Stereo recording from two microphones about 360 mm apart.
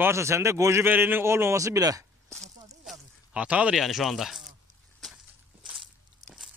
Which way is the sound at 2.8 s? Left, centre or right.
Centre.